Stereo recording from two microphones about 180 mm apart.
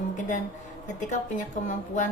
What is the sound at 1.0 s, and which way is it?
A woman's voice, 45° left (ahead or behind).